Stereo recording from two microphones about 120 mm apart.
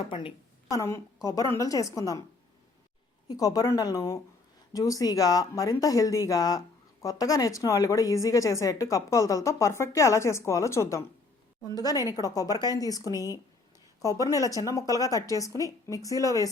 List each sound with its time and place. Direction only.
0.1 s a woman's voice: 45° left (ahead or behind)
0.7 s a woman's voice: 25° left (ahead or behind)
3.2 s a woman's voice: 30° left (ahead or behind)